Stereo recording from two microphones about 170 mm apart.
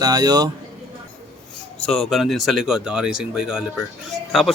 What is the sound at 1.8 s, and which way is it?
Speech, centre (ahead or behind).